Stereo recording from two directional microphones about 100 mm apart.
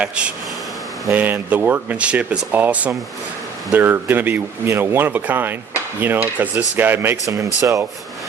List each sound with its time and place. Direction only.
0.0 s speech: 10° right (ahead or behind); by 7.9 s 30° right (ahead or behind)